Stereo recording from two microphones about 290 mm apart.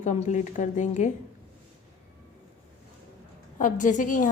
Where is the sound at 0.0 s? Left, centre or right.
Left.